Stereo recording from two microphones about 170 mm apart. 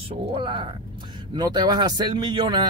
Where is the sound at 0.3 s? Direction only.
30° right (ahead or behind).